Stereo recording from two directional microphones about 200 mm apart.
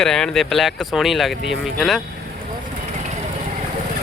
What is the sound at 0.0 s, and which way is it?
Speech, 5° left (ahead or behind).